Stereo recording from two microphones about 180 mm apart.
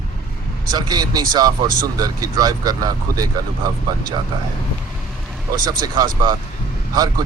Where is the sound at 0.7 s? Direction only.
20° right (ahead or behind).